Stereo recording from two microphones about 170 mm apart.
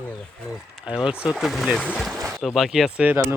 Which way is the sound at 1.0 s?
5° right (ahead or behind).